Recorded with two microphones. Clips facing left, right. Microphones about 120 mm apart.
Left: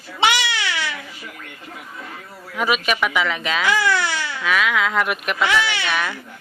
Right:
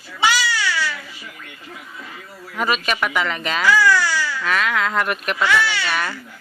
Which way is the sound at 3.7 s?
20° left (ahead or behind).